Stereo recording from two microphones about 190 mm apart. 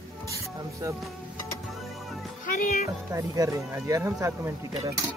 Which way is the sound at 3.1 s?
15° right (ahead or behind).